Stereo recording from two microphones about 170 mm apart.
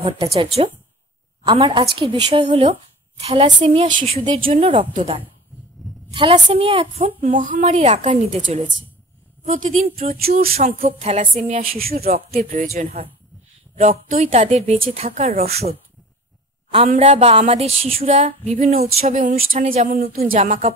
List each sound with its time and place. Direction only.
0.0 s speech: 35° right (ahead or behind)
7.2 s speech: 45° right (ahead or behind)
9.5 s speech: 45° right (ahead or behind)
10.6 s speech: 40° right (ahead or behind)
12.3 s speech: 60° right (ahead or behind)
12.7 s speech: 40° right (ahead or behind)
16.9 s speech: 40° right (ahead or behind); by 18.9 s 55° right (ahead or behind)
18.9 s speech: 40° right (ahead or behind)
20.0 s speech: 55° right (ahead or behind)